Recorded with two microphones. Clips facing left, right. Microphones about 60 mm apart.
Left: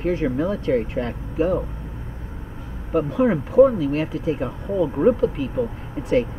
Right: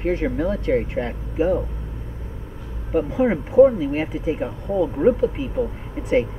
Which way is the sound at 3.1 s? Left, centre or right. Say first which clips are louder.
Even; centre.